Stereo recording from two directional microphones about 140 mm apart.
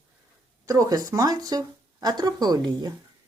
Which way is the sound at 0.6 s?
25° right (ahead or behind).